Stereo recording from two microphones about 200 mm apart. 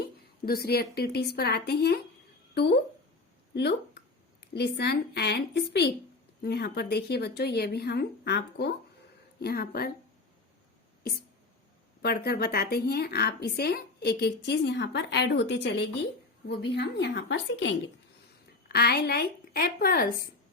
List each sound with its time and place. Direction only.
0.0 s a woman's voice: 50° left (ahead or behind)
3.5 s a woman's voice: 55° left (ahead or behind)
12.0 s a woman's voice: 50° left (ahead or behind)
18.7 s speech: 55° left (ahead or behind)